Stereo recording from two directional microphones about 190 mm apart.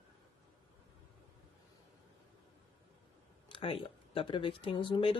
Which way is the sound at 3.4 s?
25° left (ahead or behind).